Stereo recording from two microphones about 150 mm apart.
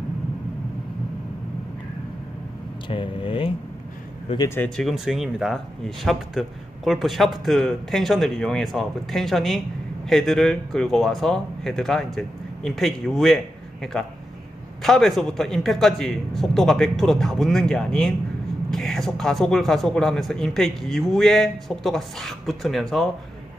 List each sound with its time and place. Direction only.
2.9 s speech: 35° left (ahead or behind)
4.6 s a man's voice: 5° left (ahead or behind)
14.8 s a man's voice: centre (ahead or behind)